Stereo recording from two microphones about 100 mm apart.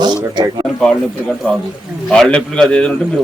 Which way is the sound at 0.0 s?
45° right (ahead or behind).